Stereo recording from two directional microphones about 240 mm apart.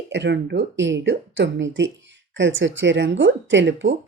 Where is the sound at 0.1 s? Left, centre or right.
Right.